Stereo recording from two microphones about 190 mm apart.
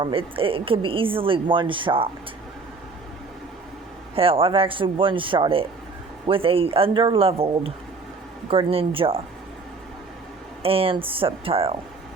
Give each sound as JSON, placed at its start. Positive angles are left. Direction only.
{"t": 0.0, "sound": "a woman's voice", "side_deg": -30}
{"t": 4.1, "sound": "a woman's voice", "side_deg": -30}
{"t": 10.6, "sound": "a woman's voice", "side_deg": -30}